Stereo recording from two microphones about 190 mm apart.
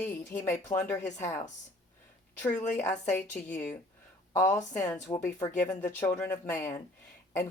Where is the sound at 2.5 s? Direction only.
40° left (ahead or behind).